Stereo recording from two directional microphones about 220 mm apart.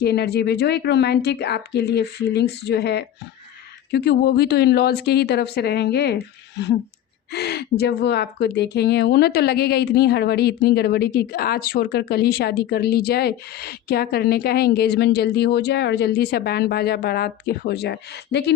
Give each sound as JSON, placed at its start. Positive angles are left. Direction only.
{"t": 0.0, "sound": "speech", "side_deg": 45}
{"t": 7.3, "sound": "speech", "side_deg": 50}